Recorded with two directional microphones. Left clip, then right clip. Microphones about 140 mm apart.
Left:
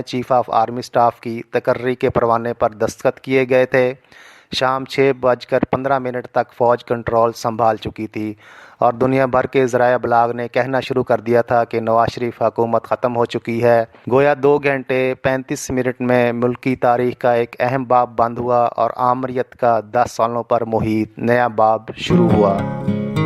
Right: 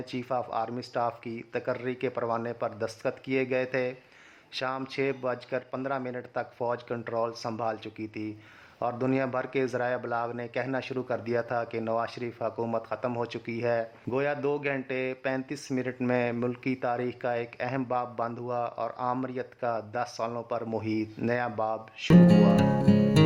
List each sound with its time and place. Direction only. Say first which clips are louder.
0.1 s speech: left 16 dB; 45° left (ahead or behind)